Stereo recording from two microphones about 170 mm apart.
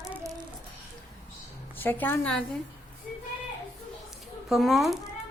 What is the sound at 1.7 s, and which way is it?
Speech, 10° left (ahead or behind).